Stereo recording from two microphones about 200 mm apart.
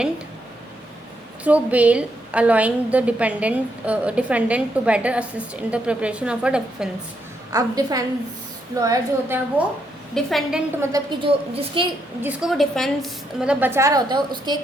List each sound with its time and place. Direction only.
1.5 s a woman's voice: 5° right (ahead or behind)
7.5 s a woman's voice: 20° right (ahead or behind)
10.2 s a woman's voice: centre (ahead or behind)
10.8 s a woman's voice: 20° right (ahead or behind)
12.2 s a woman's voice: 5° right (ahead or behind); by 14.6 s 20° right (ahead or behind)